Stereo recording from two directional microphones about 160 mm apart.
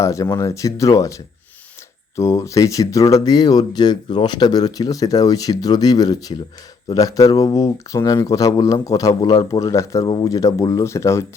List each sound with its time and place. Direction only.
0.0 s speech: 20° left (ahead or behind)